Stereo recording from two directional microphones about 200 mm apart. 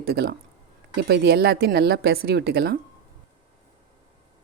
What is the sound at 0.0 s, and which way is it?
A woman's voice, 50° right (ahead or behind).